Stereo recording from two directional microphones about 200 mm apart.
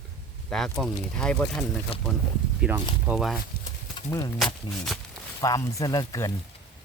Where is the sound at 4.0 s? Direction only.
15° left (ahead or behind).